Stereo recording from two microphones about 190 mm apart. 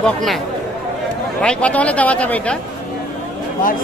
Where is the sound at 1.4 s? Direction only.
5° left (ahead or behind).